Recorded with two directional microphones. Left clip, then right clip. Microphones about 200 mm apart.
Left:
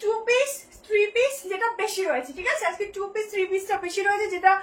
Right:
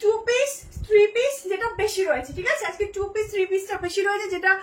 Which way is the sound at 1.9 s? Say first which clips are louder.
Right 2 dB; 20° right (ahead or behind).